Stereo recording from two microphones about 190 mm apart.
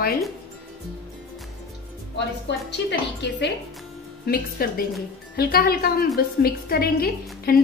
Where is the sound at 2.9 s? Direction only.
65° left (ahead or behind).